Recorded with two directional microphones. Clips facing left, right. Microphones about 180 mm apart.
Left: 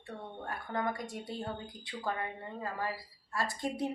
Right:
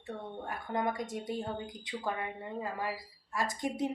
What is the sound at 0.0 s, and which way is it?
A woman's voice, 20° right (ahead or behind).